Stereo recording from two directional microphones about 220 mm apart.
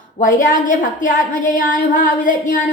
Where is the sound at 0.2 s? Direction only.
35° left (ahead or behind).